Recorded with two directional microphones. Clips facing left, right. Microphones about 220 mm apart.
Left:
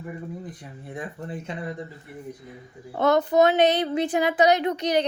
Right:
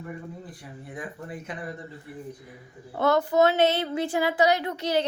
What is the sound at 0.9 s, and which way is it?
Speech, 25° left (ahead or behind).